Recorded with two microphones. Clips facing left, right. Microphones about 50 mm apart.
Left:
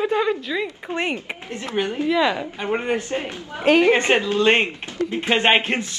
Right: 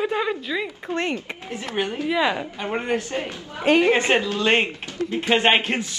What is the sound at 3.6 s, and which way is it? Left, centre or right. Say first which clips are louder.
Speech: left 2 dB; centre.